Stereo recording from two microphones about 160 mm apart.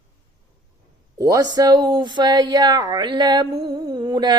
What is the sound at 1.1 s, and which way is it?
Speech, 20° right (ahead or behind).